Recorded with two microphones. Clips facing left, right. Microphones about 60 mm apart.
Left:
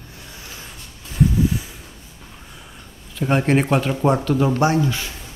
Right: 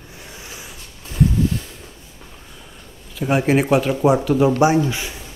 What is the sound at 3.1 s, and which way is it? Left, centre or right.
Speech, centre.